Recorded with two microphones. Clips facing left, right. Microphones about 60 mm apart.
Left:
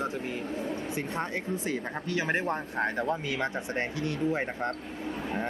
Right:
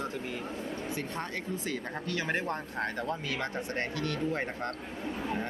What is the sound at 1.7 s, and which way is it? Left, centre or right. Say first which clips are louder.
Speech: left 3 dB; left.